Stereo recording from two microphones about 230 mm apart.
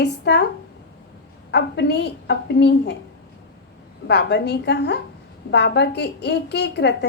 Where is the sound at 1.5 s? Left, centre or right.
Left.